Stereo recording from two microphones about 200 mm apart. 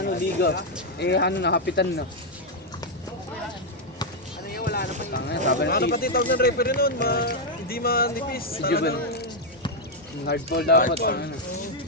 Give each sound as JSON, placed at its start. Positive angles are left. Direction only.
{"t": 0.0, "sound": "speech", "side_deg": 50}
{"t": 4.4, "sound": "music", "side_deg": 50}
{"t": 5.1, "sound": "a sound", "side_deg": 55}
{"t": 5.5, "sound": "speech", "side_deg": 50}